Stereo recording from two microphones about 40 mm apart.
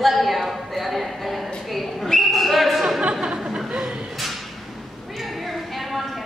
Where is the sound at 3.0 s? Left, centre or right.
Right.